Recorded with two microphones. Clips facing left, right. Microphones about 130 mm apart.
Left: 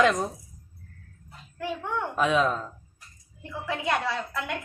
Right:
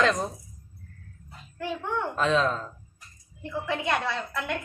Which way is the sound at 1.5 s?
Centre (ahead or behind).